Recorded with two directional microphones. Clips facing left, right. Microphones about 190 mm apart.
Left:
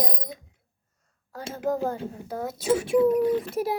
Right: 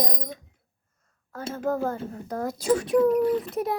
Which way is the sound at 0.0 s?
5° left (ahead or behind).